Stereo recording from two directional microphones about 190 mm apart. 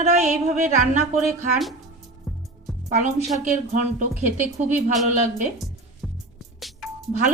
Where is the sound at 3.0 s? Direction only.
35° right (ahead or behind).